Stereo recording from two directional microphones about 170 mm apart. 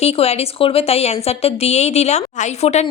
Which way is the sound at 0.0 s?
35° left (ahead or behind).